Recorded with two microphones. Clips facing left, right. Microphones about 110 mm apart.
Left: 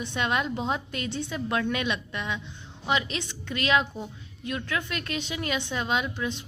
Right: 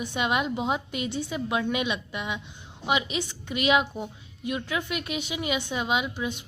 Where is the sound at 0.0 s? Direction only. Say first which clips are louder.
Right 1 dB; 10° right (ahead or behind).